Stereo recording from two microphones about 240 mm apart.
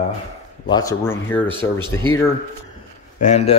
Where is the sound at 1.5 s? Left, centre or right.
Centre.